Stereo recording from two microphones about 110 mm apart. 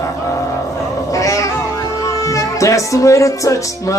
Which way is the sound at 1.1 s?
30° left (ahead or behind).